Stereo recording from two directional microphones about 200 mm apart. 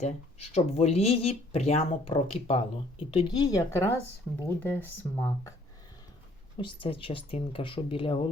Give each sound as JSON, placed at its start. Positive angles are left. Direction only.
{"t": 0.0, "sound": "speech", "side_deg": 30}
{"t": 6.6, "sound": "speech", "side_deg": 25}